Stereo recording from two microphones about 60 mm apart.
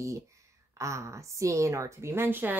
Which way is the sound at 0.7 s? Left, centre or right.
Right.